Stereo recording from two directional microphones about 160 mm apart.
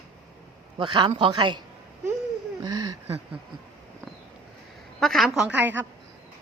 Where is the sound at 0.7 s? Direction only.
25° right (ahead or behind).